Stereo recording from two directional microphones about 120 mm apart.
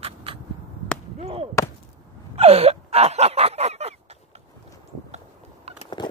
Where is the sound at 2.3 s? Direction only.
55° right (ahead or behind).